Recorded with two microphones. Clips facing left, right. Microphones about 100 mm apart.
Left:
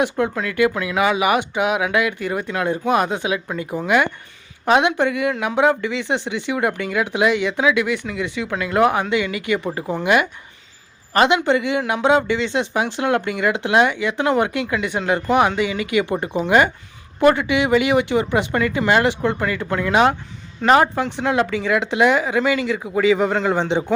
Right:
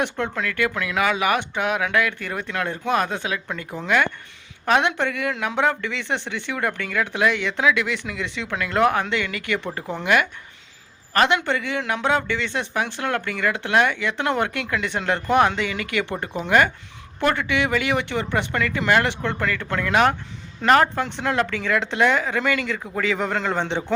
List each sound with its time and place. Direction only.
0.0 s a man's voice: 10° left (ahead or behind)